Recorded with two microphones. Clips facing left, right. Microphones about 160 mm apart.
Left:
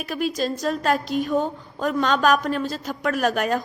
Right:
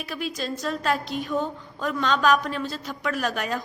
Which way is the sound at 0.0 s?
45° left (ahead or behind).